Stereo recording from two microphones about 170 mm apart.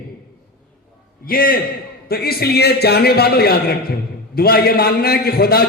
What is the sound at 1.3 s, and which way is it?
A man's voice, 60° left (ahead or behind).